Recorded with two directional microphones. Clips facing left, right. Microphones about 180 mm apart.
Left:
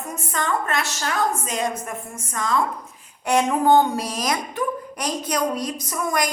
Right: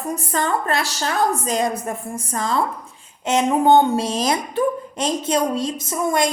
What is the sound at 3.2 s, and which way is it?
Speech, 20° right (ahead or behind).